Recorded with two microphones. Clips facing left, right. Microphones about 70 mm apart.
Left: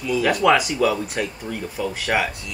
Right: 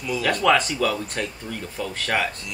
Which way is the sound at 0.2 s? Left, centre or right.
Centre.